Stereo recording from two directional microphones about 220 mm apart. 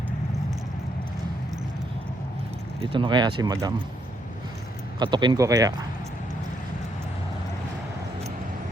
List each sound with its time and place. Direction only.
2.8 s speech: 20° right (ahead or behind)
4.9 s speech: 20° right (ahead or behind)